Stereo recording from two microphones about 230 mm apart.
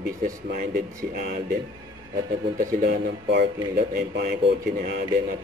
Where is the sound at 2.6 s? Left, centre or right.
Right.